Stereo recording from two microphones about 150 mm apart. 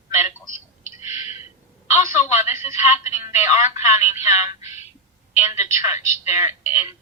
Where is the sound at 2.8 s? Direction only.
50° left (ahead or behind).